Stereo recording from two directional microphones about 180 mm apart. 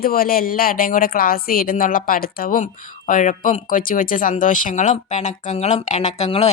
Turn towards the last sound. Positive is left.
turn(degrees=35)  # may be behind; listen again after turning